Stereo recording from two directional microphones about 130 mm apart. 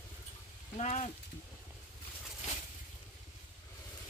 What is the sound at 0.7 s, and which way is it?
Speech, 60° left (ahead or behind).